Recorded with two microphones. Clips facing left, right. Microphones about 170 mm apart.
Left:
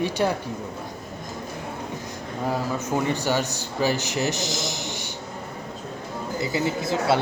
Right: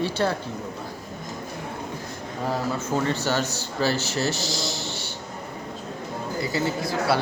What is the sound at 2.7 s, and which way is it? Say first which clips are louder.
Speech: even; 15° left (ahead or behind).